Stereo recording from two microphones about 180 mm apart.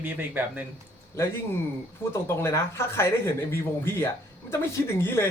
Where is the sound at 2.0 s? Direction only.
15° left (ahead or behind).